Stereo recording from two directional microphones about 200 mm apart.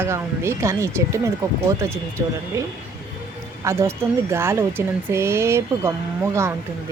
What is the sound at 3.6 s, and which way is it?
Speech, 15° right (ahead or behind).